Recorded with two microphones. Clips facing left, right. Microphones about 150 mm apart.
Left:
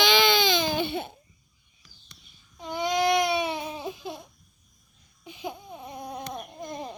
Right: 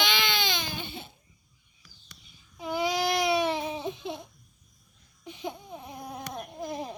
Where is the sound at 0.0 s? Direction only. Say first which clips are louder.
Left 7 dB; 90° left; by 1.1 s 65° left (ahead or behind).